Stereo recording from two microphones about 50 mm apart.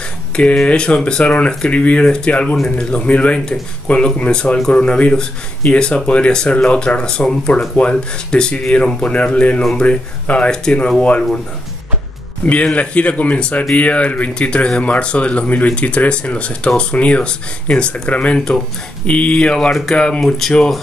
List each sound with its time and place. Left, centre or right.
0.7 s speech: centre
12.4 s speech: left